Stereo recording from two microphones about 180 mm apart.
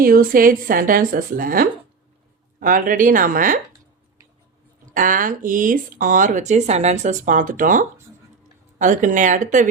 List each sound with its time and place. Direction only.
0.0 s speech: 55° right (ahead or behind)
4.9 s speech: 45° right (ahead or behind)